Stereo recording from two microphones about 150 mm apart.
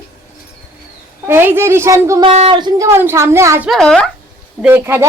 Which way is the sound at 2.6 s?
25° right (ahead or behind).